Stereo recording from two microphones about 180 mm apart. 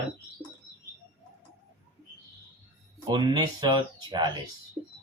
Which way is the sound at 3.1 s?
20° right (ahead or behind).